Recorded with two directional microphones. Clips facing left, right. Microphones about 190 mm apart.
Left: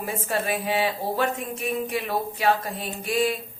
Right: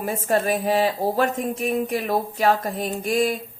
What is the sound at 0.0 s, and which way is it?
Speech, 40° right (ahead or behind).